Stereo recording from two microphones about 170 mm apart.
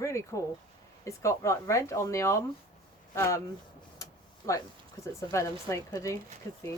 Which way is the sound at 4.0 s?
20° left (ahead or behind).